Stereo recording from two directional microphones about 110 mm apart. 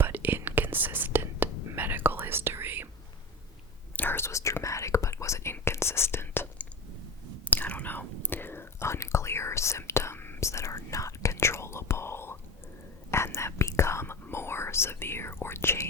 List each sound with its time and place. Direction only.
0.0 s whispering: 15° right (ahead or behind)
3.9 s whispering: 20° left (ahead or behind)